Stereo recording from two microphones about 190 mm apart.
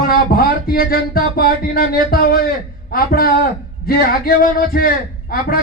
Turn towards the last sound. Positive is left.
turn(degrees=50)  # may be behind; listen again after turning